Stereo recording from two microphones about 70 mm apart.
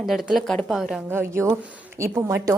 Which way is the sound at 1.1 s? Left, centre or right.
Right.